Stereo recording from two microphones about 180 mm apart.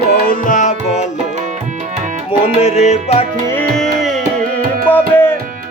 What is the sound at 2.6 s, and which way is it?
Music, 35° left (ahead or behind).